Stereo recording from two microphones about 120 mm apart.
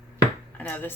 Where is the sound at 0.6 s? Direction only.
15° left (ahead or behind).